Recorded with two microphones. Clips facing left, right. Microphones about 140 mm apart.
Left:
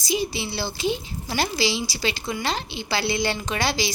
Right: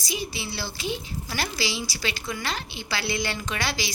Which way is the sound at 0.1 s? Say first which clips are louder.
Left 6 dB; 30° left (ahead or behind).